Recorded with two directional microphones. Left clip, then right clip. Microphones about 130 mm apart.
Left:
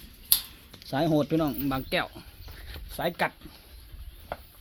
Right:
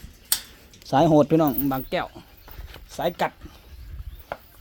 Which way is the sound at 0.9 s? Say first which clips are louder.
Right 8 dB; 65° right (ahead or behind).